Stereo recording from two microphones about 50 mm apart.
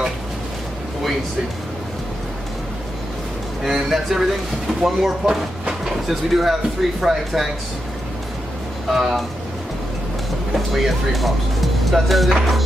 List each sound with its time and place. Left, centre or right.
3.6 s speech: centre
5.2 s speech: centre
5.9 s speech: centre
8.9 s speech: centre
10.7 s speech: centre